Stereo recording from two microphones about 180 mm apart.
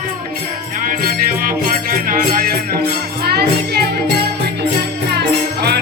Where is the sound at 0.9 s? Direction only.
50° right (ahead or behind).